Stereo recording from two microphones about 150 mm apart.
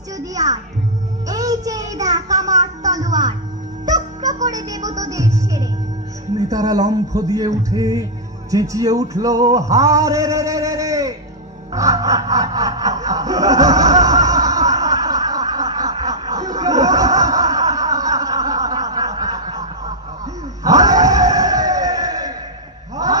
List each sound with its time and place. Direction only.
0.2 s a child's voice: 25° right (ahead or behind)
1.2 s music: 25° right (ahead or behind)
2.9 s speech: 25° right (ahead or behind)
3.8 s music: 25° right (ahead or behind)
6.3 s a sound: 25° right (ahead or behind)
11.7 s snicker: 20° right (ahead or behind)
20.6 s a sound: 25° right (ahead or behind)